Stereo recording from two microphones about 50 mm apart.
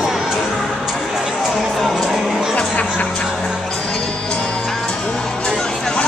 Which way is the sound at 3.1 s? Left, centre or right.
Centre.